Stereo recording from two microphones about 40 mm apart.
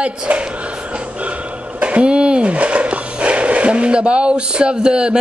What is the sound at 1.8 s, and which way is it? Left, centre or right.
Speech, right.